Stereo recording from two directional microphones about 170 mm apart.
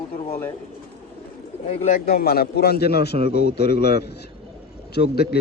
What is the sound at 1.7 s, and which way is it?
Speech, 40° left (ahead or behind).